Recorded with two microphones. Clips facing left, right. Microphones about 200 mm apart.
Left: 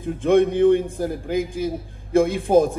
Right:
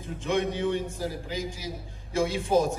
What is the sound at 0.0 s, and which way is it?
A man's voice, 55° left (ahead or behind).